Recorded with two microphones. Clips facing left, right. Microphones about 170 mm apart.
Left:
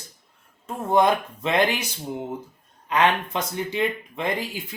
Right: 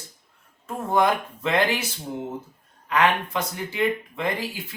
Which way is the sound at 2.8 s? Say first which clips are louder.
Even; 20° left (ahead or behind).